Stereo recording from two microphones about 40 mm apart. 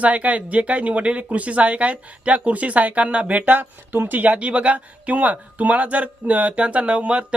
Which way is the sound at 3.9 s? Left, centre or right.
Right.